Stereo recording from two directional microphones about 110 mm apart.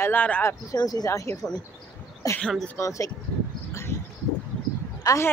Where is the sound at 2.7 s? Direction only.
30° left (ahead or behind).